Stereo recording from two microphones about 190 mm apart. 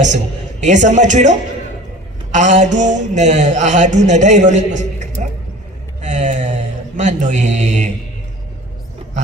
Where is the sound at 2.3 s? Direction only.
40° right (ahead or behind).